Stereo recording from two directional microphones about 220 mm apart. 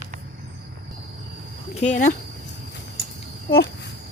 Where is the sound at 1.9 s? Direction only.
35° left (ahead or behind).